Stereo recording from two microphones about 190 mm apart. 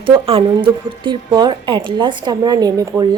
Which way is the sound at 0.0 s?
30° right (ahead or behind).